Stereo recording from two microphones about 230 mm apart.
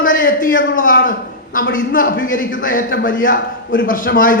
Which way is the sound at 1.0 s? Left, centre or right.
Left.